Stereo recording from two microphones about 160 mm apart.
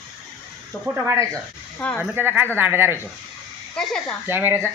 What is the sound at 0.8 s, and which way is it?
Speech, 15° right (ahead or behind).